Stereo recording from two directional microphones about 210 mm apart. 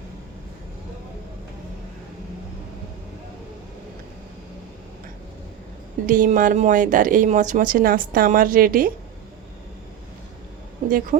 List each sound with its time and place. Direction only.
6.1 s speech: 40° right (ahead or behind)
10.8 s speech: 40° right (ahead or behind)